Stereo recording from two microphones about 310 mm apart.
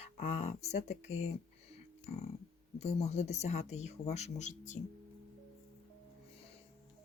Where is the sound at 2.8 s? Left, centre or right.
Left.